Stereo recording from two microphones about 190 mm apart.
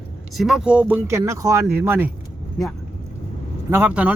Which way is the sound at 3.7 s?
10° right (ahead or behind).